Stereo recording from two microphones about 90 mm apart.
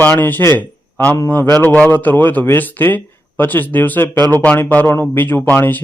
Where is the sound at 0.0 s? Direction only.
20° left (ahead or behind).